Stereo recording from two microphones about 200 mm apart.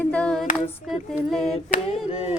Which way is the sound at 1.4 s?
30° left (ahead or behind).